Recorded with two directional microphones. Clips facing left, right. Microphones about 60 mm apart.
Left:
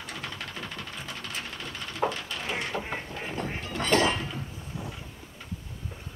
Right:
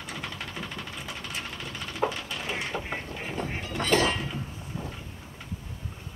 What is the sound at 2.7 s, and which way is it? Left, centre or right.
Vehicle, centre.